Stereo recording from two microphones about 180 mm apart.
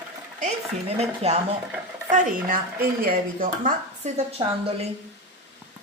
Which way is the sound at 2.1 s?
45° right (ahead or behind).